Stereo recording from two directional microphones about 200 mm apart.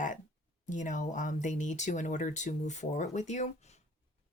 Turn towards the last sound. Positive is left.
turn(degrees=35)  # may be behind; listen again after turning